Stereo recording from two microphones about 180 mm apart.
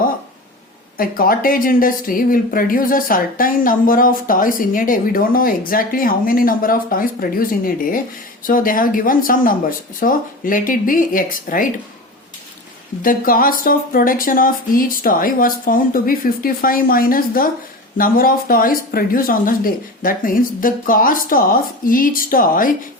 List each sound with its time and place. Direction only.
0.9 s speech: 55° left (ahead or behind)
13.0 s speech: 50° left (ahead or behind)